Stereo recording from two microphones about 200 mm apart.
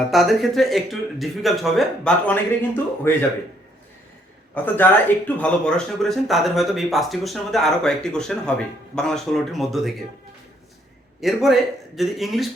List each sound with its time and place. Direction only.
0.1 s speech: centre (ahead or behind)
4.5 s speech: 10° left (ahead or behind)
11.2 s speech: centre (ahead or behind)